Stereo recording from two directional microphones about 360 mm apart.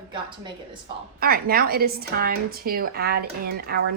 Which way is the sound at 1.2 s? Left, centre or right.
Right.